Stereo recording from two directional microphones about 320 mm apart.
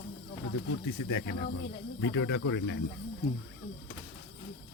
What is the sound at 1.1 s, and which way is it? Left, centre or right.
Speech, left.